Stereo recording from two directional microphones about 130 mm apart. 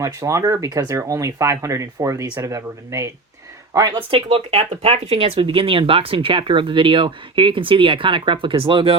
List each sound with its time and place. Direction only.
0.0 s speech: 25° right (ahead or behind)
4.1 s speech: 50° right (ahead or behind)